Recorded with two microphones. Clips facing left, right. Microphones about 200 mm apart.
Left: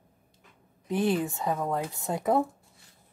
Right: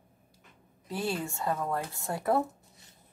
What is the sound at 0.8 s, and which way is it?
Speech, 20° left (ahead or behind).